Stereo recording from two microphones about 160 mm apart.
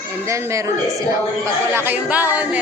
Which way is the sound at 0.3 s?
20° right (ahead or behind).